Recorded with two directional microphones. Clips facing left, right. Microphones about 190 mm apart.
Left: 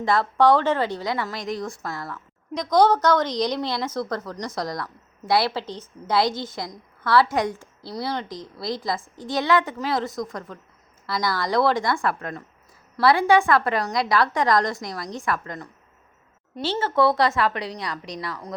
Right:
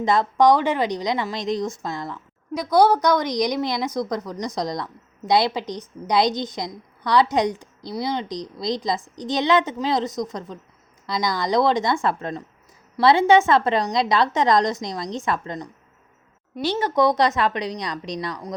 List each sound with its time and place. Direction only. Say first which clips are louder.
0.0 s a woman's voice: right 2 dB; 20° right (ahead or behind)
2.6 s a woman's voice: right 1 dB; 10° right (ahead or behind)